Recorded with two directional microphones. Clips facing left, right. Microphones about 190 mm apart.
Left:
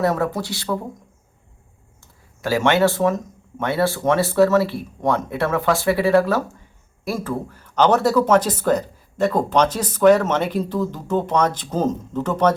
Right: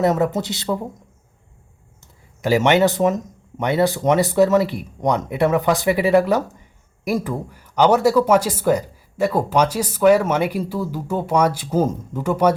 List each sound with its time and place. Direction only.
0.0 s speech: 20° right (ahead or behind)
2.4 s speech: 20° right (ahead or behind)